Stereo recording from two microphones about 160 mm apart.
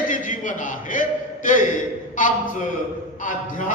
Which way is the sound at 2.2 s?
55° left (ahead or behind).